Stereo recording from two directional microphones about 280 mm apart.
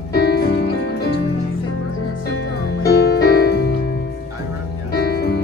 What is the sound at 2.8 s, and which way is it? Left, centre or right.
Music, left.